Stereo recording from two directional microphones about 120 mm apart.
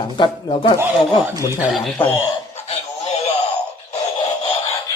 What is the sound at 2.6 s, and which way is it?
Music, 60° left (ahead or behind).